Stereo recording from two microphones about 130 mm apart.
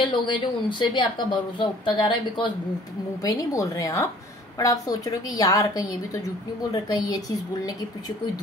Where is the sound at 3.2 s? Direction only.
25° left (ahead or behind).